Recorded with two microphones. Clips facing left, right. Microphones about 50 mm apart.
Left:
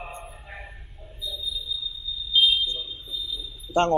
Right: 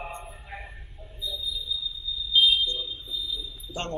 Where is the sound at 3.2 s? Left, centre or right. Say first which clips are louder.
Even; centre.